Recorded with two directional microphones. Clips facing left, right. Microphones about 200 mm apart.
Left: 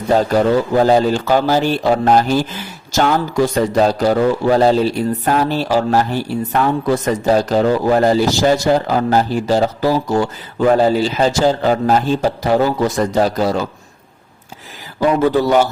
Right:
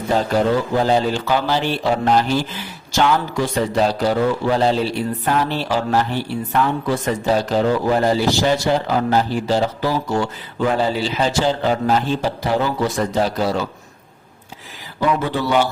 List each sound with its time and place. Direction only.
0.8 s a man's voice: 45° left (ahead or behind)
15.4 s a man's voice: 45° left (ahead or behind)